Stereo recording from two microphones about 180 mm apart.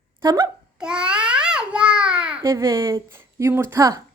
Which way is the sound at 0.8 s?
5° right (ahead or behind).